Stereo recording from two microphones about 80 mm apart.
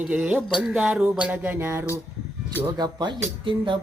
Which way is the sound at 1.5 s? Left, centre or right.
Right.